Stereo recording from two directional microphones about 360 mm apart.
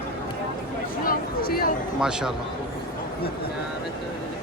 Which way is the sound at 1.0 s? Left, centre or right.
Left.